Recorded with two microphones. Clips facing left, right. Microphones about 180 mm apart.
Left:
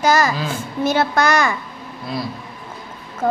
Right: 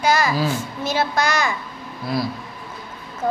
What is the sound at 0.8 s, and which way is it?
Speech, 55° left (ahead or behind).